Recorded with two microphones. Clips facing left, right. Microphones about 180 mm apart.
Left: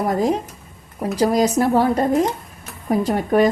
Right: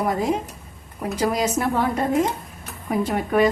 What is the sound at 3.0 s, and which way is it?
Speech, 40° left (ahead or behind).